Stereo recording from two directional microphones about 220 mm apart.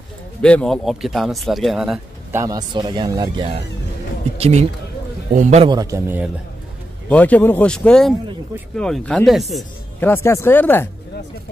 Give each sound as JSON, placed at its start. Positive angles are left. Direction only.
{"t": 0.4, "sound": "speech", "side_deg": 5}
{"t": 2.3, "sound": "a man's voice", "side_deg": -15}
{"t": 5.7, "sound": "a man's voice", "side_deg": -15}
{"t": 7.1, "sound": "speech", "side_deg": 5}
{"t": 10.0, "sound": "speech", "side_deg": 10}